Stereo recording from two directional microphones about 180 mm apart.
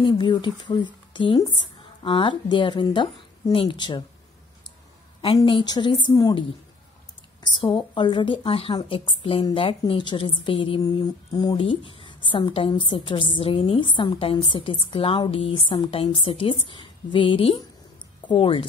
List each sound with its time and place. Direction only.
0.0 s speech: 25° left (ahead or behind)
5.2 s speech: 30° left (ahead or behind)
7.4 s speech: 25° left (ahead or behind)